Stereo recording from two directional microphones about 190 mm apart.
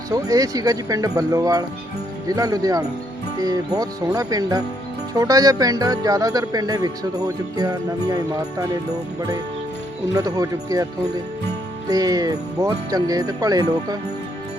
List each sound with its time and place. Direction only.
0.1 s speech: 20° right (ahead or behind)
10.2 s speech: 20° right (ahead or behind)
11.9 s speech: 20° right (ahead or behind)